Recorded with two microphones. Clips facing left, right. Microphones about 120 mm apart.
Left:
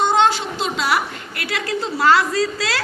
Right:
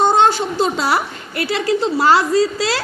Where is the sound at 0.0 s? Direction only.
40° right (ahead or behind).